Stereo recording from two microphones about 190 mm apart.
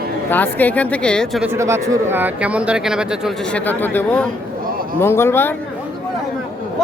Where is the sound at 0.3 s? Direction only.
10° left (ahead or behind).